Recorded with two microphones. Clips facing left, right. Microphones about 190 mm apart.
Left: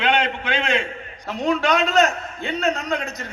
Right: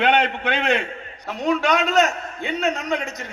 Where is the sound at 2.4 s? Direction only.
10° right (ahead or behind).